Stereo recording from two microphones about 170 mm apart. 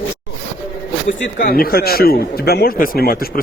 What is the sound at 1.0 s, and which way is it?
A man's voice, 60° left (ahead or behind).